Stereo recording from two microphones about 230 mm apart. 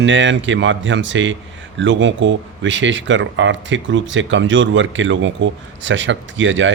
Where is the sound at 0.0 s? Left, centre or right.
Right.